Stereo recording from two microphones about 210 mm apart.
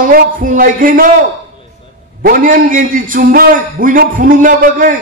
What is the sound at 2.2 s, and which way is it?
A man's voice, 40° right (ahead or behind).